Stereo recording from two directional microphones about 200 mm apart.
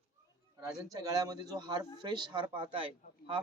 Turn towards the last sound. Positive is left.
turn(degrees=-25)  # may be behind; listen again after turning